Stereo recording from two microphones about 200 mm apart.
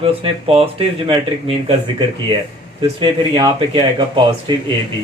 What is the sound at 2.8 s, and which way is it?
Speech, 25° right (ahead or behind).